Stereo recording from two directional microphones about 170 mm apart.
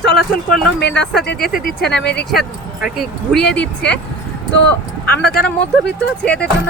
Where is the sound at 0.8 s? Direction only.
80° left.